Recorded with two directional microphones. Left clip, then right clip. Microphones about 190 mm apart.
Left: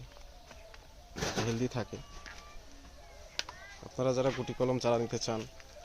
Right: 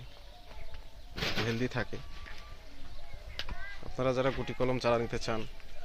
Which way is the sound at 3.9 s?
10° left (ahead or behind).